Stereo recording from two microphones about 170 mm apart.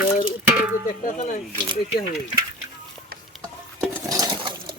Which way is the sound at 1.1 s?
45° left (ahead or behind).